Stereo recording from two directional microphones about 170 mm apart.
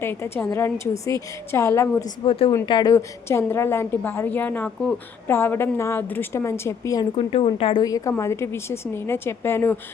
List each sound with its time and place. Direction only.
0.0 s a woman's voice: 10° left (ahead or behind)
2.2 s a woman's voice: 35° left (ahead or behind)
7.2 s a woman's voice: 35° left (ahead or behind); by 9.7 s 15° left (ahead or behind)